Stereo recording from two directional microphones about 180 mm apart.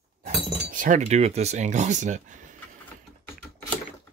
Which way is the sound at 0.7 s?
45° right (ahead or behind).